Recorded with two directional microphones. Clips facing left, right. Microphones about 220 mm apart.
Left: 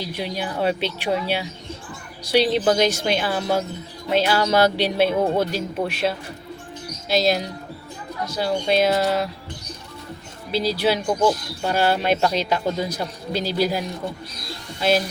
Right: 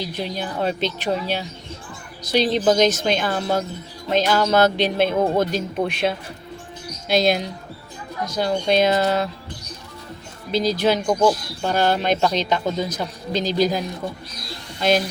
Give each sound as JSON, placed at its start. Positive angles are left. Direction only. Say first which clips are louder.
{"t": 0.0, "sound": "a man's voice", "louder": "even", "side_deg": 10}
{"t": 10.5, "sound": "speech", "louder": "right 2 dB", "side_deg": -45}
{"t": 10.8, "sound": "a man's voice", "louder": "right 1 dB", "side_deg": 10}